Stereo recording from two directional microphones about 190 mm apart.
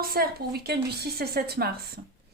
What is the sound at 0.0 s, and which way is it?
Speech, 50° right (ahead or behind).